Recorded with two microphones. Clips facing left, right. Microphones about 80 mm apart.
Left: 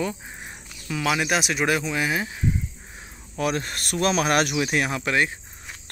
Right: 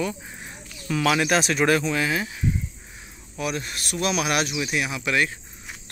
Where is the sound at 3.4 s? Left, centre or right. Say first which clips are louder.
Left 3 dB; left.